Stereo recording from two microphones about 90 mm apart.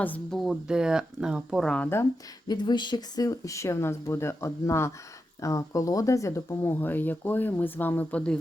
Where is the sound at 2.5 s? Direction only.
55° left (ahead or behind).